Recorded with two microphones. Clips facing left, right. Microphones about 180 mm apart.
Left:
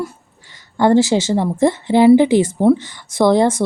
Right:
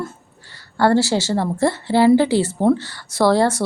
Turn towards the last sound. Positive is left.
turn(degrees=20)  # may be behind; listen again after turning